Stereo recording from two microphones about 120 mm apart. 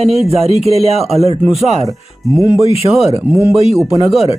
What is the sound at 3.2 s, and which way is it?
Speech, 20° right (ahead or behind).